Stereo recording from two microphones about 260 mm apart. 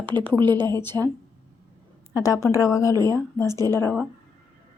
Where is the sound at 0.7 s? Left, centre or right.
Centre.